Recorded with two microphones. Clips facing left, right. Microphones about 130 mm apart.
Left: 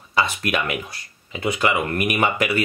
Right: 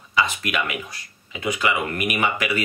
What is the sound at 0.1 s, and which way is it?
Speech, 40° left (ahead or behind).